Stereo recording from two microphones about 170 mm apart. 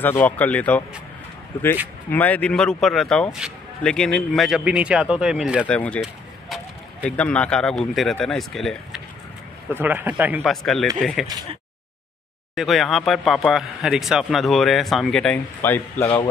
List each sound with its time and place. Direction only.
0.0 s speech: 10° left (ahead or behind)
2.0 s speech: 10° left (ahead or behind)
5.6 s speech: 5° left (ahead or behind)
7.1 s speech: 5° left (ahead or behind)
9.7 s a man's voice: 10° right (ahead or behind)
10.5 s speech: centre (ahead or behind)
12.5 s speech: centre (ahead or behind)
16.0 s speech: 35° left (ahead or behind)